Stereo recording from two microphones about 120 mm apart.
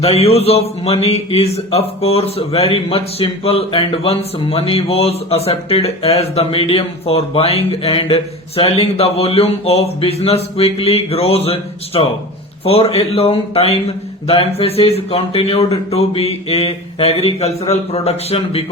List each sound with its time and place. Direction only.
0.0 s a man's voice: 60° left (ahead or behind)